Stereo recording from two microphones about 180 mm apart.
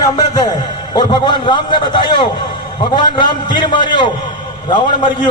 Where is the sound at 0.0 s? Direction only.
20° left (ahead or behind).